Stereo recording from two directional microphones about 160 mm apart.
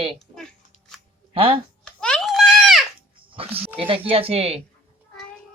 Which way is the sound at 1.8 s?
5° left (ahead or behind).